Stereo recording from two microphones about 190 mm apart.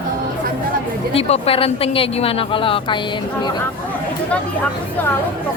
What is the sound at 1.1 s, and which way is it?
A woman's voice, 30° left (ahead or behind).